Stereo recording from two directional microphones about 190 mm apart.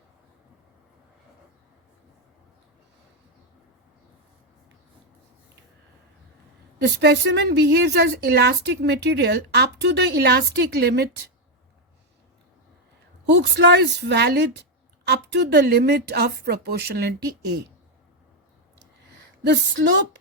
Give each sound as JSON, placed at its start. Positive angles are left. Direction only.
{"t": 6.8, "sound": "a woman's voice", "side_deg": -65}
{"t": 13.3, "sound": "a woman's voice", "side_deg": -65}
{"t": 19.8, "sound": "a woman's voice", "side_deg": -60}